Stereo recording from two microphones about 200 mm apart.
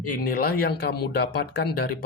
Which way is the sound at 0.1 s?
45° left (ahead or behind).